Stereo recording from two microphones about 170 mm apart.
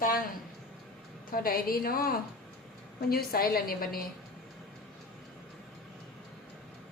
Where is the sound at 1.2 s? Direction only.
60° left (ahead or behind).